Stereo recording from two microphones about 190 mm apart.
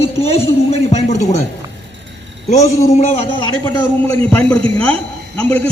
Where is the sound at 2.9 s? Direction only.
35° left (ahead or behind).